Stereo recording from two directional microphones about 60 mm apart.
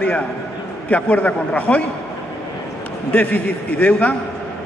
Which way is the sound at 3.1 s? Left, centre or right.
Left.